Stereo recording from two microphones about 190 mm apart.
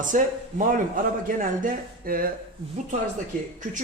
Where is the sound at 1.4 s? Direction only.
50° right (ahead or behind).